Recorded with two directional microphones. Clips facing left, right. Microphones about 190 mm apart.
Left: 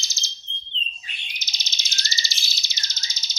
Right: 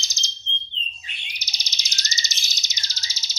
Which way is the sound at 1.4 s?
15° right (ahead or behind).